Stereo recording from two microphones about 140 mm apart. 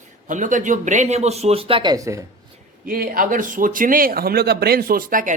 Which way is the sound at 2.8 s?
90° right.